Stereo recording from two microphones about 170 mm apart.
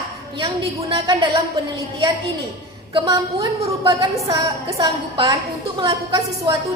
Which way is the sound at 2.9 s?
25° right (ahead or behind).